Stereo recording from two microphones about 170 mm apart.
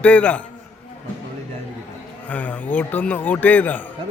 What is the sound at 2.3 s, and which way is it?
A man's voice, 10° left (ahead or behind).